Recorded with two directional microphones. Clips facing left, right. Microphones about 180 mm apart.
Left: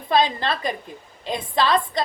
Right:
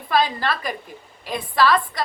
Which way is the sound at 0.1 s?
25° left (ahead or behind).